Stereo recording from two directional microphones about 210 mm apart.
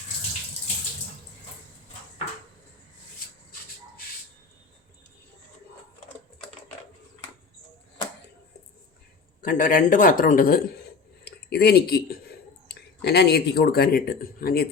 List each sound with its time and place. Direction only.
9.4 s speech: 40° left (ahead or behind)